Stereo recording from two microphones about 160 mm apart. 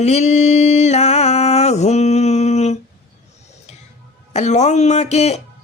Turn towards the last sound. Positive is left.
turn(degrees=40)  # may be behind; listen again after turning